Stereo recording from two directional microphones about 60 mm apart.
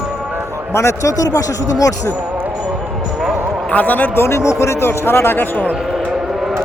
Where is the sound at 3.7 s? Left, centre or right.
Left.